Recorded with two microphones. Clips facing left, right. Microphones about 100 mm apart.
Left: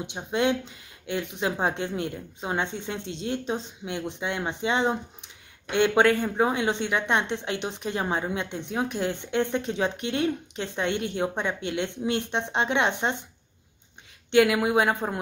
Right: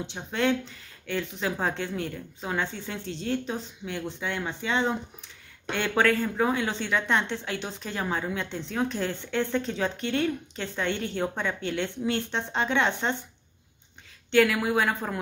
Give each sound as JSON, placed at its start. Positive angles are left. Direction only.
{"t": 0.0, "sound": "speech", "side_deg": 15}
{"t": 14.3, "sound": "speech", "side_deg": 20}